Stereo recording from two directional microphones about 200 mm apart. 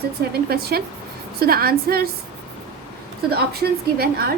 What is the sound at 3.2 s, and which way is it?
Speech, 50° right (ahead or behind).